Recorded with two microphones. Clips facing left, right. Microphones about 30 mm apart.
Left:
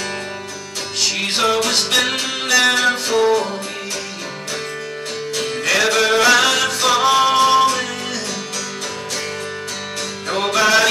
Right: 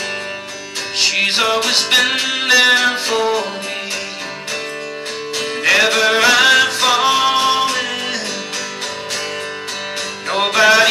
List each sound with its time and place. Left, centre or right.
0.9 s music: right
5.4 s music: right
10.3 s music: right